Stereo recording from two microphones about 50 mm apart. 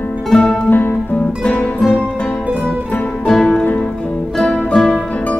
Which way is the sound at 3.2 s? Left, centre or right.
Centre.